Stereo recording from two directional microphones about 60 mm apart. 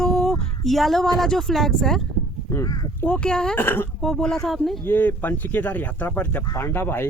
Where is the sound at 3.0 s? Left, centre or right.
Centre.